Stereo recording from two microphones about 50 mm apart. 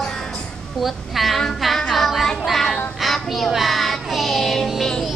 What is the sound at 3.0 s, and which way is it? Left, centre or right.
Child singing, centre.